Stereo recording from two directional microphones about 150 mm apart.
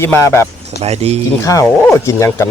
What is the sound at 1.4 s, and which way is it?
Speech, 20° left (ahead or behind).